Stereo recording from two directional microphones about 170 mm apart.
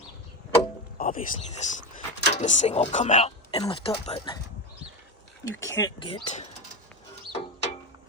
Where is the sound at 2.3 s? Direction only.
45° left (ahead or behind).